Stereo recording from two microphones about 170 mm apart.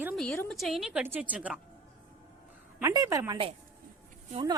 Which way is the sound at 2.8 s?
20° right (ahead or behind).